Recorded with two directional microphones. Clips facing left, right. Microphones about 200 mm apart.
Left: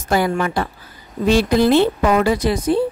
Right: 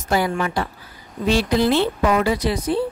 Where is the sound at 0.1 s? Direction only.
50° left (ahead or behind).